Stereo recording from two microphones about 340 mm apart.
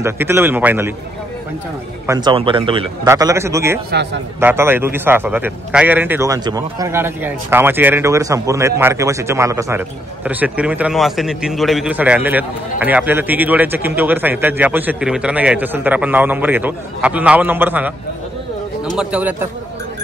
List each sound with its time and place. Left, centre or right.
0.0 s a man's voice: centre
2.0 s a man's voice: centre
3.9 s a man's voice: right
4.4 s a man's voice: centre
18.9 s a man's voice: centre